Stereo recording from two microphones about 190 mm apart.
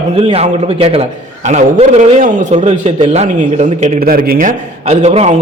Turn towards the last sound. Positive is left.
turn(degrees=-35)  # may be behind; listen again after turning